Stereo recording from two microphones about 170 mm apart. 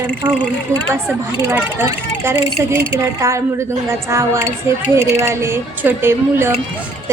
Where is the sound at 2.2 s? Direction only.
15° right (ahead or behind).